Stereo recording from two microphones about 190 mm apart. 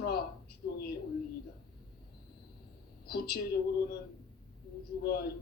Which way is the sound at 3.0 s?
55° left (ahead or behind).